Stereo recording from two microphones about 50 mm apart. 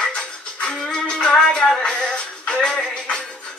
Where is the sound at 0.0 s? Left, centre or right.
Left.